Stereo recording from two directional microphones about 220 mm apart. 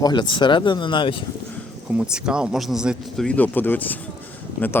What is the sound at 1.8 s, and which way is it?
Speech, 5° right (ahead or behind).